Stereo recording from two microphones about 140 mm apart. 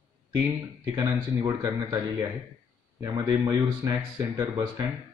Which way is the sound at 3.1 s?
25° right (ahead or behind).